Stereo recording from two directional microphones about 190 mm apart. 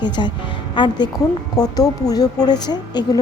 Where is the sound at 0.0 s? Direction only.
25° left (ahead or behind).